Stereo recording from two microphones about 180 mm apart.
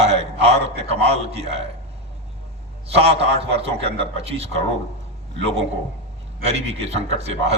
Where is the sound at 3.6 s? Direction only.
35° right (ahead or behind).